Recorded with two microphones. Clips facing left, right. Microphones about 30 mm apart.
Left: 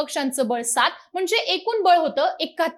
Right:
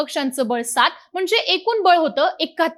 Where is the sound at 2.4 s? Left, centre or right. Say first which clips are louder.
Right 3 dB; right.